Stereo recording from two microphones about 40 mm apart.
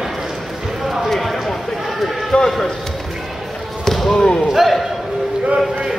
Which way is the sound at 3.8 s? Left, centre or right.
Centre.